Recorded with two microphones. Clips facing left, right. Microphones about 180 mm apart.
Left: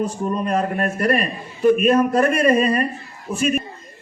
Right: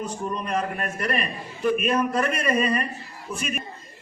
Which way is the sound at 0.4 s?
45° left (ahead or behind).